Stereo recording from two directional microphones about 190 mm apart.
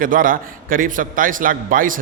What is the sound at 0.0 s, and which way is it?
A man's voice, 45° right (ahead or behind).